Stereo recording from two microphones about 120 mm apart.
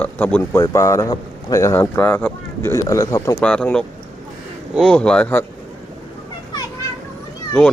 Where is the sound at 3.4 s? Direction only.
10° left (ahead or behind).